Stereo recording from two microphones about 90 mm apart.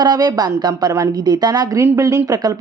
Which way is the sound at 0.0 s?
50° right (ahead or behind).